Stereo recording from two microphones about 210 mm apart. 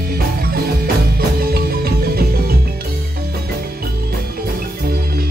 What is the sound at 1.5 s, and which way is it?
Music, 45° right (ahead or behind).